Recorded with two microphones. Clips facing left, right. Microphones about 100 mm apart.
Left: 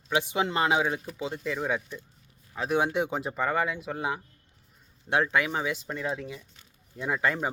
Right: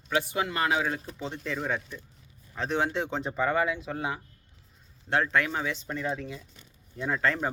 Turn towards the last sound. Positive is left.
turn(degrees=15)  # may be behind; listen again after turning